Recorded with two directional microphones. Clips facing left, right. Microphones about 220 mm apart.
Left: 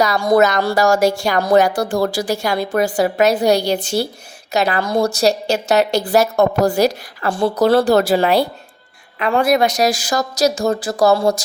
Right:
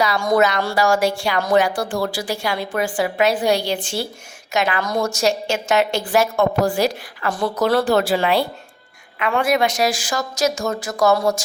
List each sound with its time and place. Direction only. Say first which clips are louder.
0.0 s speech: left 4 dB; 40° left (ahead or behind)